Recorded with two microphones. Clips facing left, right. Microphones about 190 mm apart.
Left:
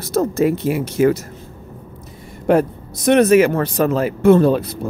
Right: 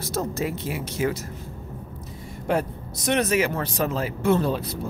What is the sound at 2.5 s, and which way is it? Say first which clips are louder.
Speech: left 9 dB; 55° left (ahead or behind).